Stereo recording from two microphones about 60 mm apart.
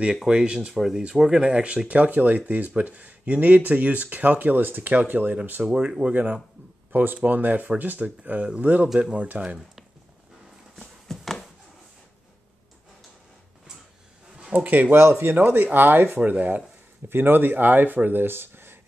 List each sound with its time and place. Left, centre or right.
0.2 s speech: centre
5.7 s speech: centre
6.1 s speech: right
8.8 s speech: centre
9.1 s speech: right
10.8 s a sound: centre
14.5 s speech: right
15.0 s speech: right
15.3 s speech: right
17.1 s speech: right